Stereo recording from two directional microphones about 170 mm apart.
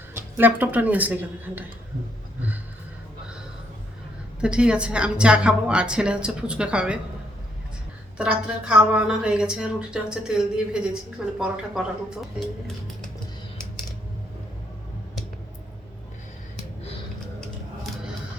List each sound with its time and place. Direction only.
0.1 s a woman's voice: 10° right (ahead or behind)
4.4 s a woman's voice: 5° right (ahead or behind)
8.2 s a woman's voice: 5° right (ahead or behind)